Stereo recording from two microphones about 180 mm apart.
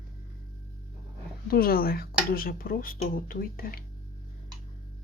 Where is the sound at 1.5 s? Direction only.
55° left (ahead or behind).